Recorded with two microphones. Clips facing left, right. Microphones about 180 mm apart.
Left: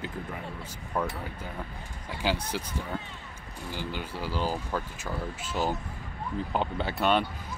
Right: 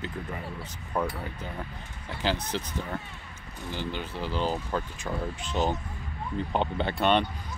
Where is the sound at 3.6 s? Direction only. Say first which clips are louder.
Right 2 dB; 10° left (ahead or behind).